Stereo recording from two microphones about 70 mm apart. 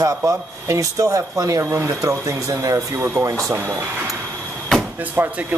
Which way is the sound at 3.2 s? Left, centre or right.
Right.